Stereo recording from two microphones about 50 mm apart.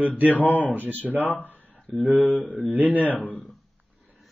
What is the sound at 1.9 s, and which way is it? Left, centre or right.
Speech, right.